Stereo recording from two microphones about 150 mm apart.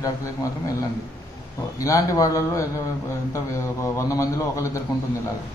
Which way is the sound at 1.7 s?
20° left (ahead or behind).